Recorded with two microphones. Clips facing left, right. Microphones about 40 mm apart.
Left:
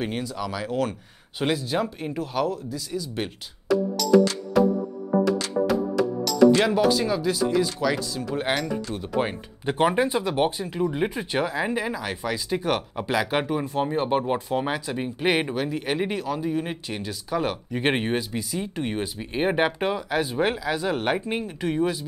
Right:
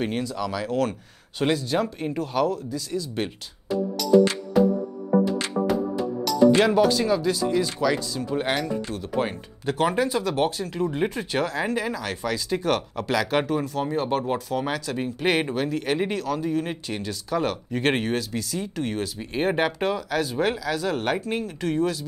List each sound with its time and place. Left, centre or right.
0.0 s speech: centre
3.7 s music: left
5.5 s music: centre
6.0 s music: left
6.6 s speech: centre
9.2 s speech: centre